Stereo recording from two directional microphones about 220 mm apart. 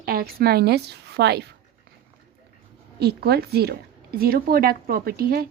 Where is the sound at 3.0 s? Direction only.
45° right (ahead or behind).